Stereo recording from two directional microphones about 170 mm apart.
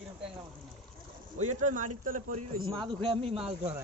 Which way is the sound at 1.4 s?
45° right (ahead or behind).